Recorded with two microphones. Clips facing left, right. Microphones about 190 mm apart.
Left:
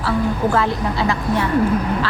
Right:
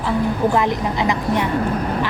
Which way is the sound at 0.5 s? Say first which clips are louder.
Right 1 dB; 15° right (ahead or behind).